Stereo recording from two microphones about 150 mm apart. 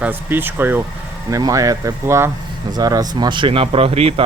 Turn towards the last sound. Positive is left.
turn(degrees=-40)  # may be behind; listen again after turning